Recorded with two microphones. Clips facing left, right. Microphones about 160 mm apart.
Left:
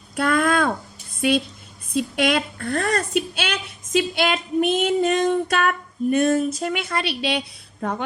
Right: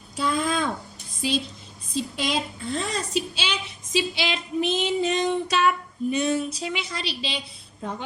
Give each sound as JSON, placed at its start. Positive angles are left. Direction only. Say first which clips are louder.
{"t": 0.2, "sound": "a sound", "louder": "left 5 dB", "side_deg": 60}
{"t": 1.2, "sound": "a woman's voice", "louder": "left 6 dB", "side_deg": 60}
{"t": 3.9, "sound": "female singing", "louder": "left 5 dB", "side_deg": 55}